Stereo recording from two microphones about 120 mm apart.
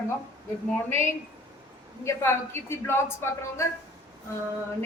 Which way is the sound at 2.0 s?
20° left (ahead or behind).